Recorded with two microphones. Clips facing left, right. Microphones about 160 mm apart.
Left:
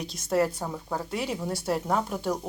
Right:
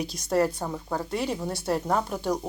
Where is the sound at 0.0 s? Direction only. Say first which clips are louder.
Right 1 dB; centre (ahead or behind).